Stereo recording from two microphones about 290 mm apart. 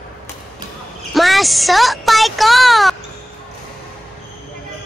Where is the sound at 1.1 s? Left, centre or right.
Centre.